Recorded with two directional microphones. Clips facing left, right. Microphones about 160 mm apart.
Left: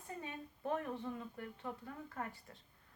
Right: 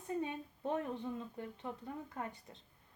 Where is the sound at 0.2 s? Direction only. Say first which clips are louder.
Right 6 dB; 20° right (ahead or behind).